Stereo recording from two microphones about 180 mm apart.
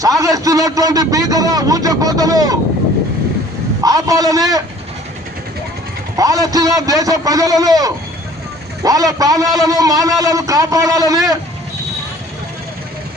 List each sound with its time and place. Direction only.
0.0 s a man's voice: 20° right (ahead or behind)
3.8 s a man's voice: 20° right (ahead or behind)
6.1 s a man's voice: 20° right (ahead or behind)